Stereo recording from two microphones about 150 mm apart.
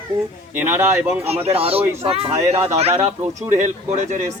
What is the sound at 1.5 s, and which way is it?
A child's voice, 40° right (ahead or behind).